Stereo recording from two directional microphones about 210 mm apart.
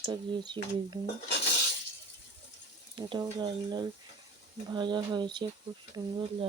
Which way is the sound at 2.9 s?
25° right (ahead or behind).